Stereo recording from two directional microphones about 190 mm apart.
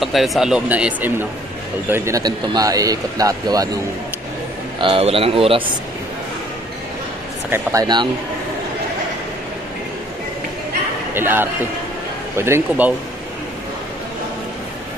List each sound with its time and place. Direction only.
0.0 s speech: centre (ahead or behind); by 3.7 s 20° right (ahead or behind)
4.8 s speech: 30° right (ahead or behind)
7.5 s speech: 20° right (ahead or behind)
11.1 s speech: 10° right (ahead or behind)